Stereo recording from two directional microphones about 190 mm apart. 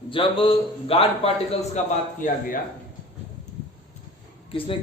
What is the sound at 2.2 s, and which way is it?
Speech, 45° left (ahead or behind).